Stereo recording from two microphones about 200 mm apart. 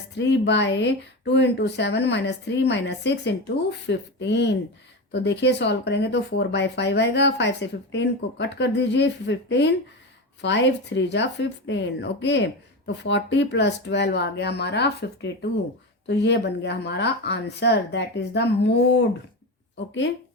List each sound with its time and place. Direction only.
0.2 s speech: 60° left (ahead or behind)